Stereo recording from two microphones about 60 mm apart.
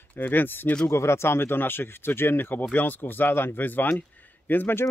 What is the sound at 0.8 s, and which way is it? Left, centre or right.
Speech, left.